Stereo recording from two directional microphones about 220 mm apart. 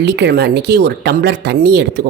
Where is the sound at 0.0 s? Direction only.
50° right (ahead or behind).